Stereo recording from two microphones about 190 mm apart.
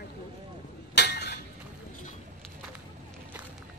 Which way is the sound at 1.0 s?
60° left (ahead or behind).